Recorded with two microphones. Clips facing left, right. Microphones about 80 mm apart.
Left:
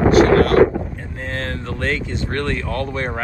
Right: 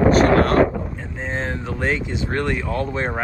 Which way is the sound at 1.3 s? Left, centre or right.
Centre.